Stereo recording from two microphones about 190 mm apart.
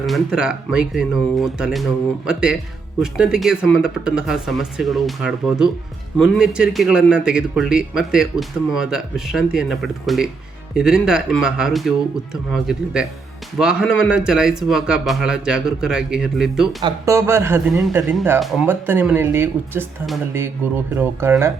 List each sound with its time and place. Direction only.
0.0 s speech: centre (ahead or behind)
16.8 s speech: 15° right (ahead or behind)
18.3 s speech: centre (ahead or behind)
18.7 s speech: 10° right (ahead or behind)
20.9 s speech: 10° right (ahead or behind)